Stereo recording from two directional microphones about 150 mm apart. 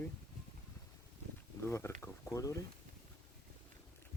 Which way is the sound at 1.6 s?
20° left (ahead or behind).